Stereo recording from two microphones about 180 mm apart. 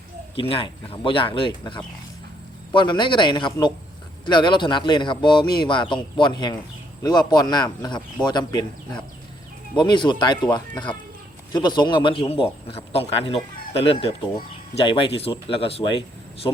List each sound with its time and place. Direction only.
0.3 s speech: 30° left (ahead or behind)
9.7 s speech: 25° left (ahead or behind)